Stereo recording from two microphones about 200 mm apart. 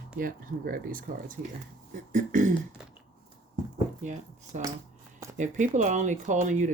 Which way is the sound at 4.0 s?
35° right (ahead or behind).